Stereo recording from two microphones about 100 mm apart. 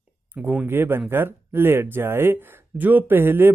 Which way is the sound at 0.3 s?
15° right (ahead or behind).